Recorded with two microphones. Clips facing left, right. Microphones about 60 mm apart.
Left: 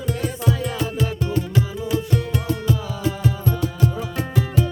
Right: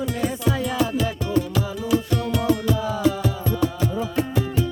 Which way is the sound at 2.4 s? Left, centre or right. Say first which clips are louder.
Right 3 dB; right.